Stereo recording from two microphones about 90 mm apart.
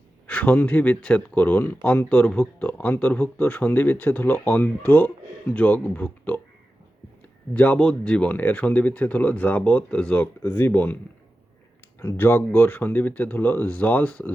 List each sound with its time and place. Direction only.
0.3 s speech: 15° left (ahead or behind)
10.4 s speech: 25° left (ahead or behind)
11.9 s speech: 25° left (ahead or behind)